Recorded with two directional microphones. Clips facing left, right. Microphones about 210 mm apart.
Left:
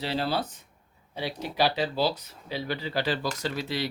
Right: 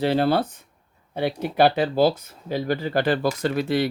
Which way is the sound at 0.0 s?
55° right (ahead or behind).